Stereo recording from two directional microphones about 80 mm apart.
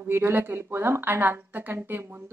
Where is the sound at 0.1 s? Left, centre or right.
Right.